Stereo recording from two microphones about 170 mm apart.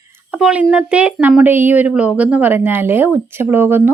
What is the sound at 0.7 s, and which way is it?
Speech, 5° right (ahead or behind).